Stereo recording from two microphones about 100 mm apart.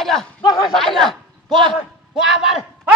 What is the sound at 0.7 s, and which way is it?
Speech, centre (ahead or behind).